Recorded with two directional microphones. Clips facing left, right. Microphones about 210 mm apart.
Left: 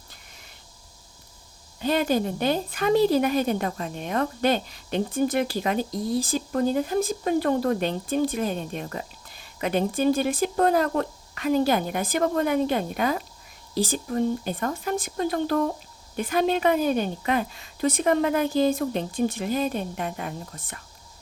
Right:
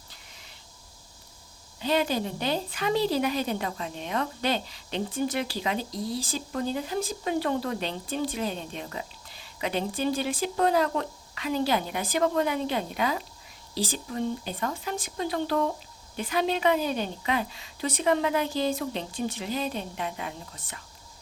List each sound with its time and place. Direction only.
1.8 s a woman's voice: 50° left (ahead or behind)